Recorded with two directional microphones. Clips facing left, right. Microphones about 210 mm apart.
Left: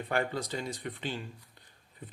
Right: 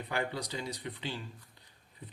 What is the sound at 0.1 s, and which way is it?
Speech, 50° left (ahead or behind).